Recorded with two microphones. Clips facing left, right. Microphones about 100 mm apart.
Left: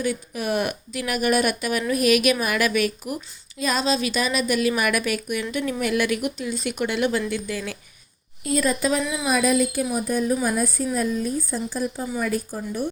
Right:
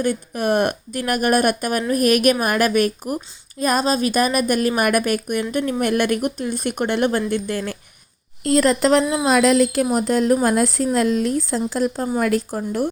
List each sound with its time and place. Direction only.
0.0 s a woman's voice: 55° right (ahead or behind)
8.4 s speech: 70° right (ahead or behind)
9.2 s speech: 90° right